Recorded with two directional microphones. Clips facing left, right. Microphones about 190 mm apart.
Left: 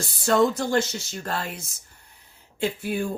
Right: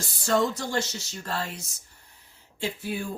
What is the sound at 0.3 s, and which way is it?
Speech, 55° left (ahead or behind).